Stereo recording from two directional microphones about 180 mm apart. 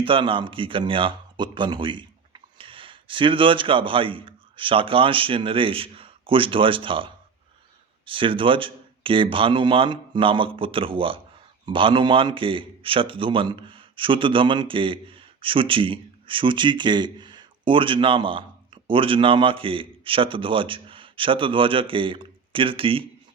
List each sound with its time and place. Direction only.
0.0 s a man's voice: 30° right (ahead or behind)